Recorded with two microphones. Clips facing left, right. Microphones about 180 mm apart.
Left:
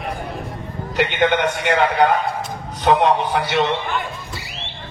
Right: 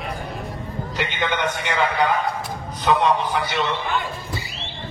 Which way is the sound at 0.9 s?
60° left (ahead or behind).